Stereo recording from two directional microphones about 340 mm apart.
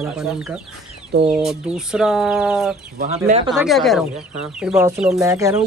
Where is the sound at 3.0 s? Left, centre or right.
Right.